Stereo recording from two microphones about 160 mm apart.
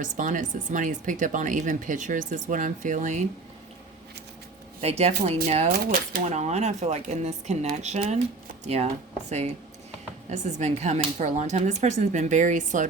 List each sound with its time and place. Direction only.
0.0 s speech: 55° right (ahead or behind)
4.8 s speech: 40° right (ahead or behind)
5.7 s speech: 60° right (ahead or behind)
6.2 s speech: 45° right (ahead or behind)
10.2 s speech: 45° right (ahead or behind)